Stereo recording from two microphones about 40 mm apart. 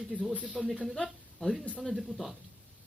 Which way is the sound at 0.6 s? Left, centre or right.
Centre.